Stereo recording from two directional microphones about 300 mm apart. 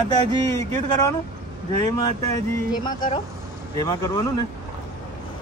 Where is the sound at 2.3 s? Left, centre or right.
Centre.